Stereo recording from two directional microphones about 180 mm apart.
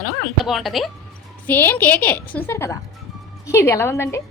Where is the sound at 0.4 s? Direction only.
Centre (ahead or behind).